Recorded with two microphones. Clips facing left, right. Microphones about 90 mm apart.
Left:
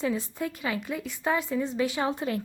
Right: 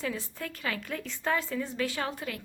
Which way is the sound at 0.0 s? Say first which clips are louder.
Left 6 dB; 20° left (ahead or behind).